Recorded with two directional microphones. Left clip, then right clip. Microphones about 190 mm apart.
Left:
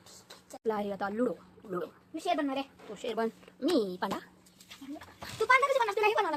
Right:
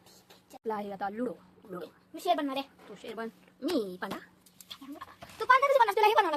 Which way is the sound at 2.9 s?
15° left (ahead or behind).